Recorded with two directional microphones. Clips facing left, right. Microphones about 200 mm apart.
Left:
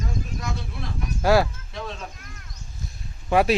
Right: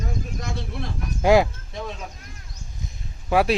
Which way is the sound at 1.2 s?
15° right (ahead or behind).